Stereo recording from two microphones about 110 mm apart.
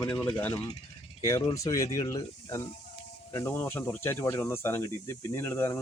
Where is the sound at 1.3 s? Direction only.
30° left (ahead or behind).